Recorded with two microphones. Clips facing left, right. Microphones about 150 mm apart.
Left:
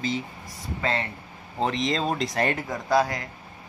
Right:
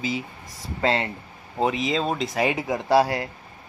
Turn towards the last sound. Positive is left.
turn(degrees=-30)  # may be behind; listen again after turning